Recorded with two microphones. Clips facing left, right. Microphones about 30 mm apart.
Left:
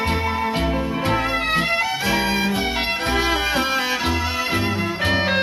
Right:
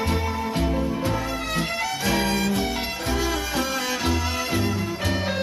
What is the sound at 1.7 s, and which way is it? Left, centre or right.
Music, left.